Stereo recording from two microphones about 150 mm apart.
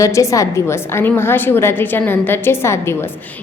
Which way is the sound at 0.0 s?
20° left (ahead or behind).